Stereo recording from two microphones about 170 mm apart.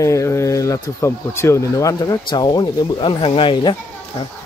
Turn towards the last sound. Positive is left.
turn(degrees=35)  # may be behind; listen again after turning